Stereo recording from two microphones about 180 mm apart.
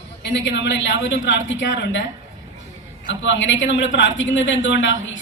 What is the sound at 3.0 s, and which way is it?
A man's voice, 90° left.